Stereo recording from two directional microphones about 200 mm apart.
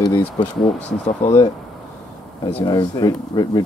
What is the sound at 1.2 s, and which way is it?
Speech, 35° left (ahead or behind).